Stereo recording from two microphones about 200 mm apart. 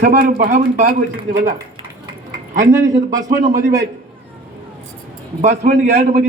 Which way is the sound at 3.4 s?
40° right (ahead or behind).